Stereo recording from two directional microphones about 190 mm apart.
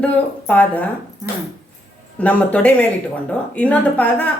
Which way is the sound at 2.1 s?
5° left (ahead or behind).